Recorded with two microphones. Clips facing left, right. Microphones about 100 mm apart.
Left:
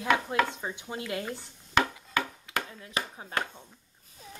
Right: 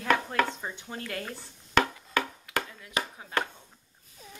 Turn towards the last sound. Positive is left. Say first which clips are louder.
# right 1 dB
turn(degrees=35)  # may be behind; listen again after turning